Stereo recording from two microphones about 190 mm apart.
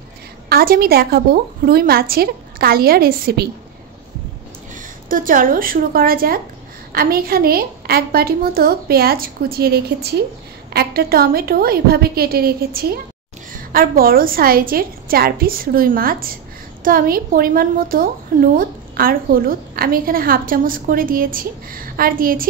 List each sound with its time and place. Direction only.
0.5 s a woman's voice: 50° right (ahead or behind)
4.7 s a woman's voice: 45° right (ahead or behind)